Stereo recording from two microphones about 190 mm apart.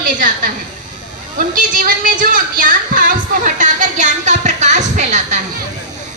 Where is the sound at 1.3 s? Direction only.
45° right (ahead or behind).